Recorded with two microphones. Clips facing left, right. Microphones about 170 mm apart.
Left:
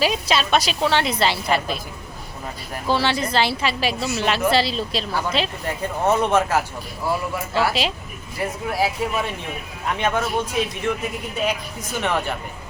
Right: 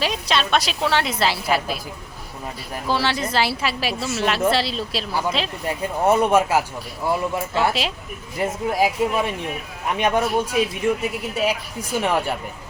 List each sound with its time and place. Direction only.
0.0 s a woman's voice: 5° left (ahead or behind)
2.8 s a woman's voice: centre (ahead or behind); by 7.2 s 20° right (ahead or behind)
7.7 s a woman's voice: centre (ahead or behind)
8.4 s a woman's voice: 20° right (ahead or behind)
11.3 s a woman's voice: 10° right (ahead or behind)